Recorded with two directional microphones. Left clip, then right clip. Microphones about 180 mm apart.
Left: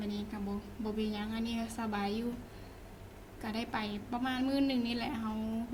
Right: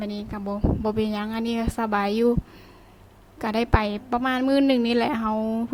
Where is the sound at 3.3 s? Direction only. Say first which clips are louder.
Right 14 dB; 50° right (ahead or behind).